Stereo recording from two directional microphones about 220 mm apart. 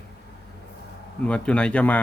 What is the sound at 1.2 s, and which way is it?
Speech, 5° left (ahead or behind).